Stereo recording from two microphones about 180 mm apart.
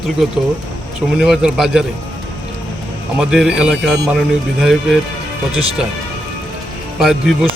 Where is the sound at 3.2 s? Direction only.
5° right (ahead or behind).